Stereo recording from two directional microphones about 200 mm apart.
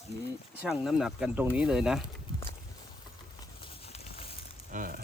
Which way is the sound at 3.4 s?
25° left (ahead or behind).